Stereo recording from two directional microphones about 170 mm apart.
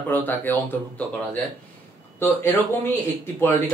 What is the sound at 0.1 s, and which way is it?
Speech, 10° left (ahead or behind).